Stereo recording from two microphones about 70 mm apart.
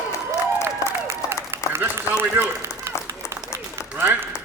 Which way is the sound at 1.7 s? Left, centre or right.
Right.